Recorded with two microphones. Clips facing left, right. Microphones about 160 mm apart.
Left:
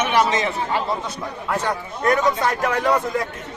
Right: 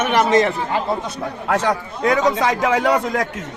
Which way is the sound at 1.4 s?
90° right.